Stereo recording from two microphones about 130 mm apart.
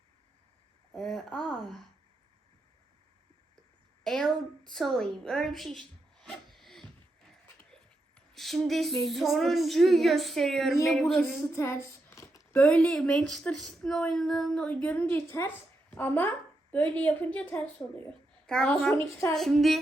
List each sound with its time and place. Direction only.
0.9 s speech: 5° left (ahead or behind)
4.0 s a woman's voice: 5° left (ahead or behind)
11.5 s a sound: 20° left (ahead or behind)
12.5 s a woman's voice: 10° left (ahead or behind)